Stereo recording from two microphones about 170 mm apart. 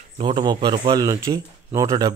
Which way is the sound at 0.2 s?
25° right (ahead or behind).